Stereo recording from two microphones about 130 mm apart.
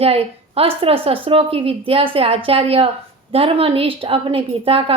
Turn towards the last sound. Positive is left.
turn(degrees=-45)  # may be behind; listen again after turning